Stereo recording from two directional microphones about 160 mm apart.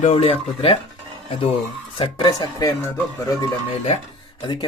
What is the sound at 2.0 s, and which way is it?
Speech, 30° left (ahead or behind).